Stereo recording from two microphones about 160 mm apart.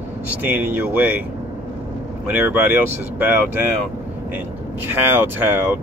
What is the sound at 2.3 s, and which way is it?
Speech, 10° right (ahead or behind).